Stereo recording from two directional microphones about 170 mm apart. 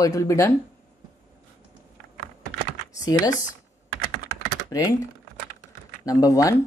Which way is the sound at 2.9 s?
20° left (ahead or behind).